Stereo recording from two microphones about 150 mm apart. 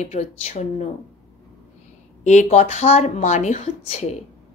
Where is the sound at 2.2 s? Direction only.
50° left (ahead or behind).